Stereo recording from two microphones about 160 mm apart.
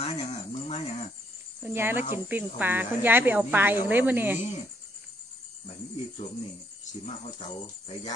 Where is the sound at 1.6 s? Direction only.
15° right (ahead or behind).